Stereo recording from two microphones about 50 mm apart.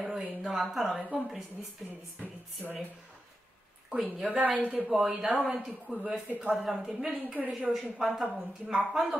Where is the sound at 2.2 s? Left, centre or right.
Right.